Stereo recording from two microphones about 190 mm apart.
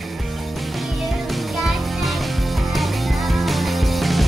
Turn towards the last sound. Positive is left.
turn(degrees=0)  # may be behind; listen again after turning